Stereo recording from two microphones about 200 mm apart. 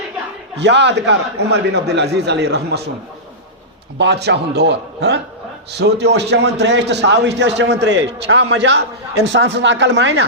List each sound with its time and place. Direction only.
0.5 s a man's voice: 60° right (ahead or behind)
3.9 s a man's voice: 60° right (ahead or behind)